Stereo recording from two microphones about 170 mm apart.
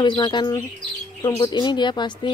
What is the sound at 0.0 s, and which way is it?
Speech, 25° left (ahead or behind).